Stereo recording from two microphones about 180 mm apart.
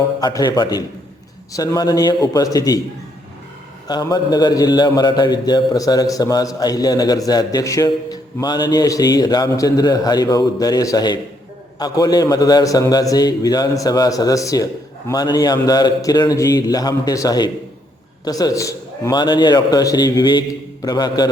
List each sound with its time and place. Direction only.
0.2 s a man's voice: 25° left (ahead or behind)
3.8 s a man's voice: 20° left (ahead or behind)